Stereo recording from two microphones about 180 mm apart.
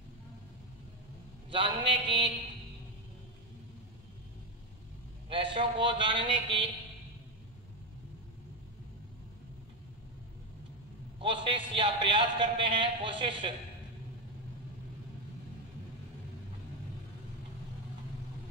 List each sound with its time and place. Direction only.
1.5 s a man's voice: 30° right (ahead or behind)
5.3 s a man's voice: 30° right (ahead or behind)
11.1 s a man's voice: 30° right (ahead or behind)